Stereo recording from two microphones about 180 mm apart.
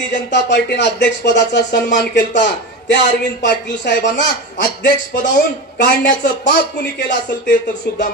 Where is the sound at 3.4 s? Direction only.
70° left (ahead or behind).